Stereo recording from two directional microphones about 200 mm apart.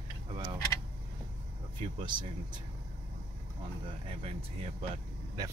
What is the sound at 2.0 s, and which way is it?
Speech, 20° right (ahead or behind).